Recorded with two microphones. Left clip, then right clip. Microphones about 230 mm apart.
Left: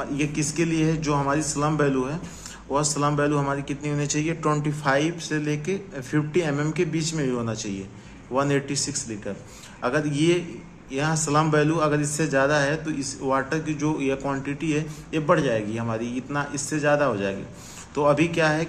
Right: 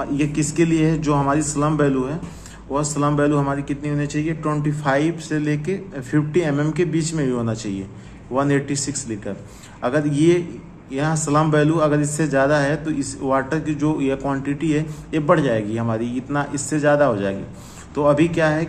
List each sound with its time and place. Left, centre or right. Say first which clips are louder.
0.0 s a man's voice: right 5 dB; centre